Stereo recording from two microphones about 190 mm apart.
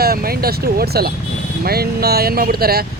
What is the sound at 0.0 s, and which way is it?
Speech, 55° right (ahead or behind).